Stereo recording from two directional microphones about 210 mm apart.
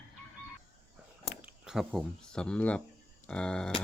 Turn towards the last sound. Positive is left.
turn(degrees=5)  # may be behind; listen again after turning